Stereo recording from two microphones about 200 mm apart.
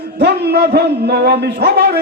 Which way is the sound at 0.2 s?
55° right (ahead or behind).